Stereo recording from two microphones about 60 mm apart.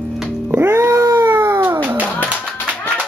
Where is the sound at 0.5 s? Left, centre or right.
Right.